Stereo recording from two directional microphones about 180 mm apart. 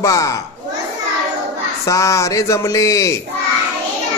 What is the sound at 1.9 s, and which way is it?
Speech, 15° left (ahead or behind).